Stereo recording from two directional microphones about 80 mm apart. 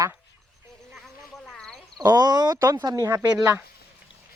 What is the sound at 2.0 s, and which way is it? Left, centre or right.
Speech, right.